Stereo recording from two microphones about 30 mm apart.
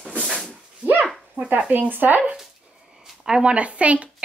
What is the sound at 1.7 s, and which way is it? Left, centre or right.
Speech, right.